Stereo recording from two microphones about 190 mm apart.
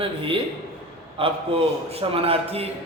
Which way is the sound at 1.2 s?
30° right (ahead or behind).